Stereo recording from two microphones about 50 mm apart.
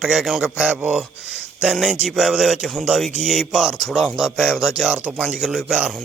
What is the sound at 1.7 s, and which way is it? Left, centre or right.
Speech, centre.